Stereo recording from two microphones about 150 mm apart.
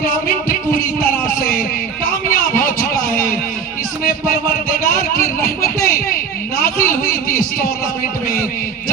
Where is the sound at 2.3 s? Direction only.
70° left (ahead or behind).